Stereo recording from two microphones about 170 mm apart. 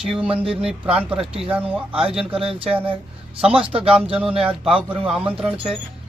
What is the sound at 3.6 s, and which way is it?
Music, 35° right (ahead or behind).